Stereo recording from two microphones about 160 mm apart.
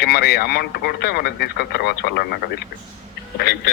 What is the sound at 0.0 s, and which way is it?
A man's voice, 90° left.